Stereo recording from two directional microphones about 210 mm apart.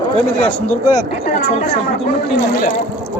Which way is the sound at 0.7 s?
15° left (ahead or behind).